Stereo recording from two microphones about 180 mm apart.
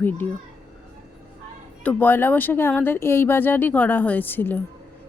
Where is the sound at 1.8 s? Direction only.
10° left (ahead or behind).